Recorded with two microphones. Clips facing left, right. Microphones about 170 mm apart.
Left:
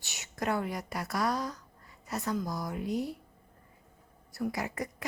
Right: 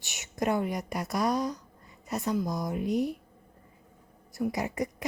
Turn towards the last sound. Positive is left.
turn(degrees=-20)  # may be behind; listen again after turning